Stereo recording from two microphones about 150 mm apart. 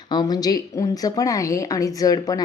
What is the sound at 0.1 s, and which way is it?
A woman's voice, 30° left (ahead or behind).